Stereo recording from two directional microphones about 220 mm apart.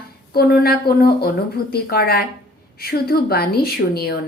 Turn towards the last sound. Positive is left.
turn(degrees=45)  # may be behind; listen again after turning